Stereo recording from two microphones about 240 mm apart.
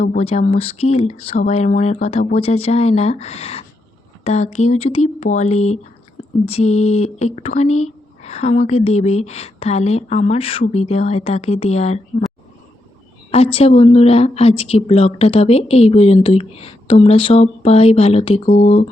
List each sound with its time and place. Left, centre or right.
0.0 s speech: left
13.3 s speech: left